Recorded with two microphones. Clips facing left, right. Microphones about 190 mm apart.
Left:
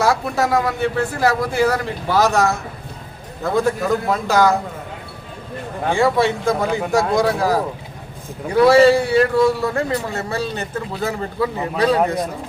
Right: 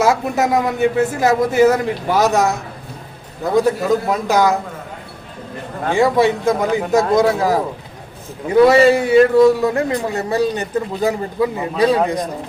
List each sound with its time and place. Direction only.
0.0 s a man's voice: 20° right (ahead or behind)
5.9 s a man's voice: 20° right (ahead or behind)